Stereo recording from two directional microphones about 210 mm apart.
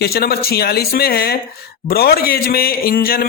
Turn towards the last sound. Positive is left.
turn(degrees=45)  # may be behind; listen again after turning